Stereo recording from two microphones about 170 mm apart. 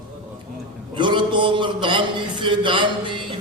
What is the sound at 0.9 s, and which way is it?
A man's voice, 30° right (ahead or behind).